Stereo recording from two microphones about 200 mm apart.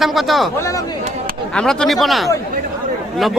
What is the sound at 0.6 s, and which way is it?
Speech, 15° left (ahead or behind).